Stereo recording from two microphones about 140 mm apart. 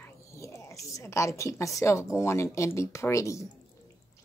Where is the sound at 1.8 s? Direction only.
20° left (ahead or behind).